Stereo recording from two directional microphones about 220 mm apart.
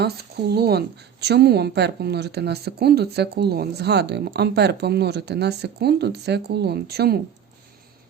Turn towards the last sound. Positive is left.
turn(degrees=-45)  # may be behind; listen again after turning